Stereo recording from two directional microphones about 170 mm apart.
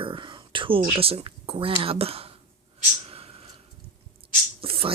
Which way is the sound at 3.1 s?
35° right (ahead or behind).